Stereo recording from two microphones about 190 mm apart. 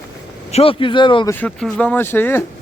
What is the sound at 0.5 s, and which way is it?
Speech, 30° left (ahead or behind).